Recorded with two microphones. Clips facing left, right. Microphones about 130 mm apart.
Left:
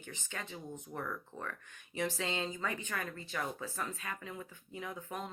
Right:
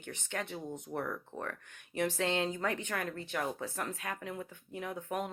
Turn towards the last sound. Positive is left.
turn(degrees=-60)  # may be behind; listen again after turning